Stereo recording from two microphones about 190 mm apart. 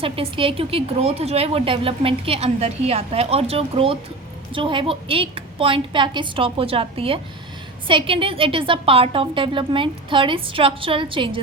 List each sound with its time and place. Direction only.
0.0 s a woman's voice: 30° right (ahead or behind)